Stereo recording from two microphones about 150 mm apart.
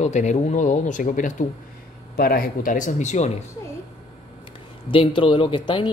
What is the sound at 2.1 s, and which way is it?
Speech, 85° left.